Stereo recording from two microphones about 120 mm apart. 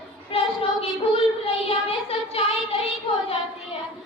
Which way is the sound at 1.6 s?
55° left (ahead or behind).